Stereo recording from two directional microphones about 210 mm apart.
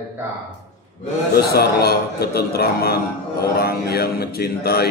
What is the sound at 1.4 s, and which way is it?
Speech, 50° left (ahead or behind).